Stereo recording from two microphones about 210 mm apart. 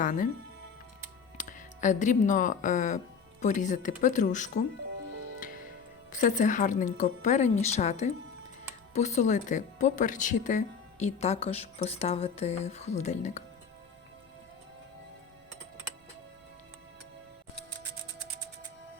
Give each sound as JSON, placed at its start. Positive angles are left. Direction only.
{"t": 0.0, "sound": "speech", "side_deg": 40}
{"t": 1.4, "sound": "speech", "side_deg": 35}
{"t": 6.1, "sound": "speech", "side_deg": 35}